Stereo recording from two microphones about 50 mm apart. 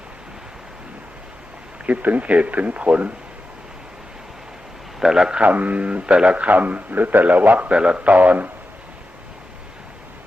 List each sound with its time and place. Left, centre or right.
1.9 s speech: right
4.9 s a man's voice: centre
5.4 s a man's voice: right